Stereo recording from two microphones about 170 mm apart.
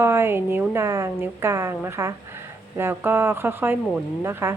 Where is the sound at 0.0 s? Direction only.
15° right (ahead or behind).